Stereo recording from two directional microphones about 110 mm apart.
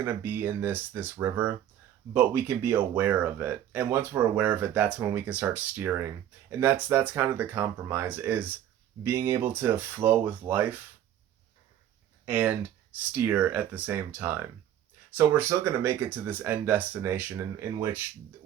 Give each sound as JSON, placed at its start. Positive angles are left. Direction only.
{"t": 0.0, "sound": "speech", "side_deg": -20}
{"t": 12.2, "sound": "speech", "side_deg": -15}